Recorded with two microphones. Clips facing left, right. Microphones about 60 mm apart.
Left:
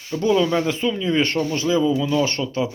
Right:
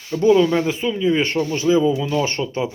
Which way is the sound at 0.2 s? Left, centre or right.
Right.